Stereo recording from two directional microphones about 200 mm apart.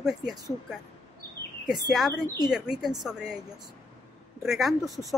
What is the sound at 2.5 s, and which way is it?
Speech, centre (ahead or behind).